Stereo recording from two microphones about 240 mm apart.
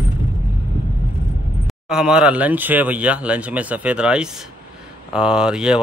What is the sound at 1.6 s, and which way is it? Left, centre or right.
Speech, centre.